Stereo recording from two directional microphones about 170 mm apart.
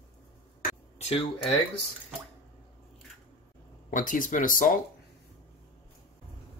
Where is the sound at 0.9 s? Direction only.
40° left (ahead or behind).